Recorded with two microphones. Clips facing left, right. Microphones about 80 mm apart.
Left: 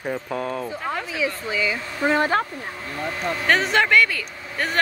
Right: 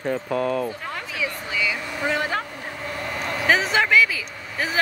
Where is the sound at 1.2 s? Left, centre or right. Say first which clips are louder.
Left 1 dB; left.